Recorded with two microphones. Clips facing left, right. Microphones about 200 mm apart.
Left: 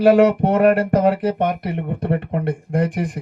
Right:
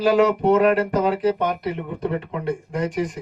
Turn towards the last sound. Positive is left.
turn(degrees=55)  # may be behind; listen again after turning